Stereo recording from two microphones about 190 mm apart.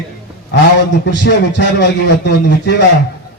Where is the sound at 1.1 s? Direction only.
65° left (ahead or behind).